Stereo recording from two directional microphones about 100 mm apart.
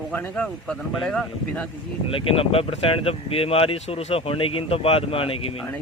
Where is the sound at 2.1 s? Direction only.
65° left (ahead or behind).